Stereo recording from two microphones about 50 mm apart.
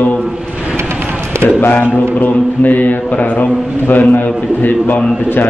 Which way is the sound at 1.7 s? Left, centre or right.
Left.